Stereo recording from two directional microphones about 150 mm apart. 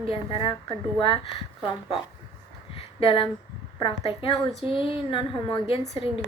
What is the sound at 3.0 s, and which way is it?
A woman's voice, 35° left (ahead or behind).